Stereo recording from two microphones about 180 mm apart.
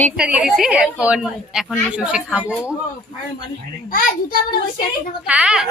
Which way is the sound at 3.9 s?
50° left (ahead or behind).